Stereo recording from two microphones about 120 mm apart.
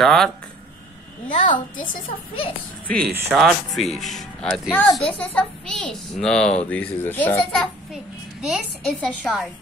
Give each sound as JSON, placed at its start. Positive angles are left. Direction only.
{"t": 0.0, "sound": "a woman's voice", "side_deg": 0}
{"t": 1.9, "sound": "a woman's voice", "side_deg": 50}
{"t": 2.9, "sound": "speech", "side_deg": 5}
{"t": 7.5, "sound": "a child's voice", "side_deg": -5}